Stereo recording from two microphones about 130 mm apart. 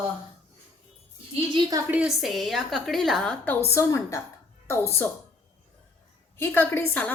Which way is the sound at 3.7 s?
20° left (ahead or behind).